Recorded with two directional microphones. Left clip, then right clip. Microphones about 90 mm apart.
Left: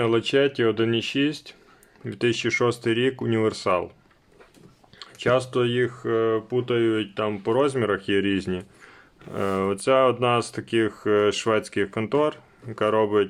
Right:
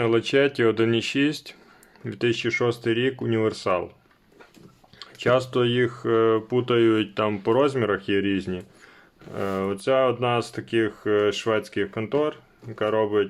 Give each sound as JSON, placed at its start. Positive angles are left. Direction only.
{"t": 0.0, "sound": "speech", "side_deg": 10}
{"t": 2.1, "sound": "speech", "side_deg": 20}
{"t": 4.9, "sound": "a sound", "side_deg": 0}
{"t": 5.5, "sound": "speech", "side_deg": -25}
{"t": 7.4, "sound": "speech", "side_deg": -15}
{"t": 7.8, "sound": "speech", "side_deg": 0}